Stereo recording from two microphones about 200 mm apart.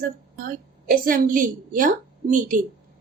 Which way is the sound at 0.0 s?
45° right (ahead or behind).